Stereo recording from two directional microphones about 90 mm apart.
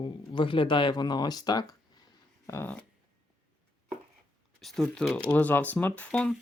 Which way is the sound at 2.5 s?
30° left (ahead or behind).